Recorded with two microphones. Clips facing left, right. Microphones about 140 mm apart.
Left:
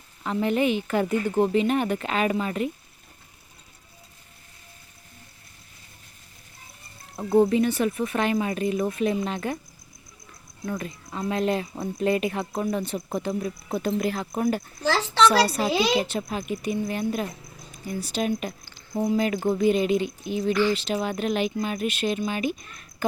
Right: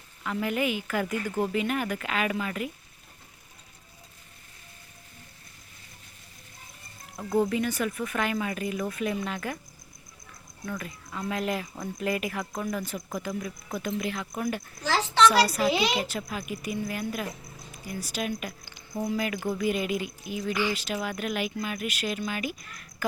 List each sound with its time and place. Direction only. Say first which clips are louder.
0.2 s a woman's voice: left 5 dB; 30° left (ahead or behind)
7.2 s a woman's voice: left 6 dB; 30° left (ahead or behind)
10.7 s a woman's voice: left 5 dB; 30° left (ahead or behind)
20.5 s speech: left 6 dB; 10° right (ahead or behind)
20.7 s a woman's voice: left 5 dB; 25° left (ahead or behind)